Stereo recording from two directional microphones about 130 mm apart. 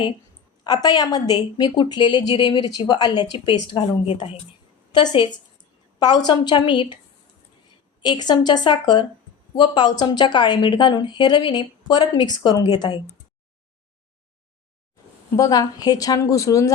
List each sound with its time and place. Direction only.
0.6 s a woman's voice: 30° left (ahead or behind); by 4.4 s 45° left (ahead or behind)
4.9 s a woman's voice: 35° left (ahead or behind)
8.0 s a woman's voice: 35° left (ahead or behind)
15.4 s a woman's voice: 30° left (ahead or behind)